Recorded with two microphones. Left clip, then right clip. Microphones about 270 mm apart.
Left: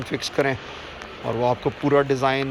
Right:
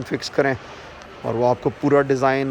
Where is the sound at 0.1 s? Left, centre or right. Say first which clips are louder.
Right 2 dB; right.